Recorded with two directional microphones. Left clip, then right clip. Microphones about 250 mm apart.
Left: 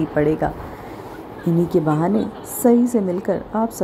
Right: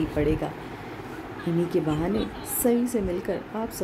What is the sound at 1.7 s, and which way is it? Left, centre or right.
Speech, centre.